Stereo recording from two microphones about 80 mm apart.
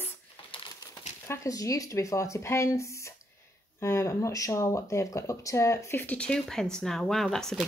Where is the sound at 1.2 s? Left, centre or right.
Left.